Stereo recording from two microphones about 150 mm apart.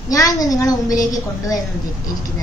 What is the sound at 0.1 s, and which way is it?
A woman's voice, 25° left (ahead or behind).